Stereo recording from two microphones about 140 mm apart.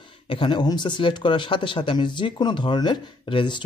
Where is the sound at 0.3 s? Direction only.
35° left (ahead or behind).